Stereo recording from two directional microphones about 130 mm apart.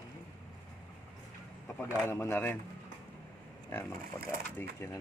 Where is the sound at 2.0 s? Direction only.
15° left (ahead or behind).